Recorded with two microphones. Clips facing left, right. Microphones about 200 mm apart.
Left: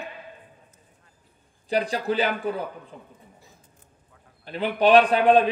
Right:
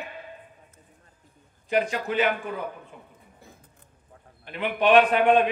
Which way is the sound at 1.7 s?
35° left (ahead or behind).